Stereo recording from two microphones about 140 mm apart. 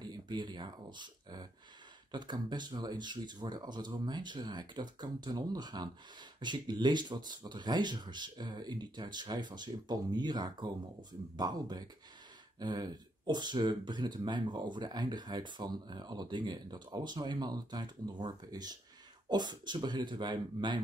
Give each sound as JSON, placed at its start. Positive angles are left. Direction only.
{"t": 0.0, "sound": "speech", "side_deg": -30}